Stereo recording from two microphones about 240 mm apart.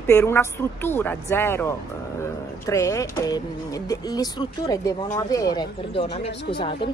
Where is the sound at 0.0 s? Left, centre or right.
Centre.